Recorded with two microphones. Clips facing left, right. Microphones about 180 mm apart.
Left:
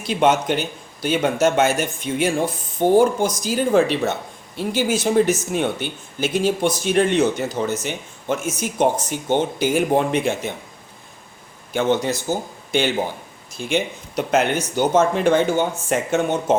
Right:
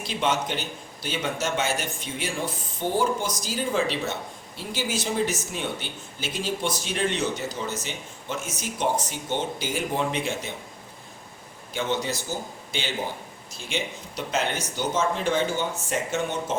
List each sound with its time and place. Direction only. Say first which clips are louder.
0.0 s speech: left 8 dB; 50° left (ahead or behind)
11.7 s speech: left 8 dB; 55° left (ahead or behind)
13.6 s speech: left 9 dB; 55° left (ahead or behind)